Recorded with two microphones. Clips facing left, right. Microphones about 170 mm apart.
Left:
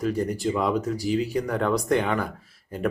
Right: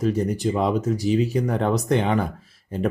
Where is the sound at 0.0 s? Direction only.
20° right (ahead or behind).